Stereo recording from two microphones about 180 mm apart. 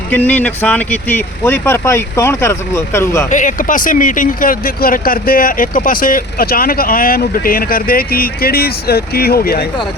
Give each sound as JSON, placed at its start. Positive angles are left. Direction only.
{"t": 0.1, "sound": "speech", "side_deg": 10}
{"t": 3.2, "sound": "speech", "side_deg": 45}